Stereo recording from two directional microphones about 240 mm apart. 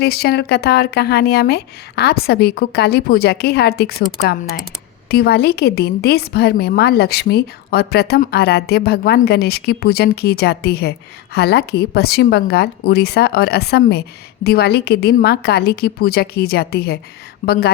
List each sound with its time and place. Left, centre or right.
0.0 s a woman's voice: left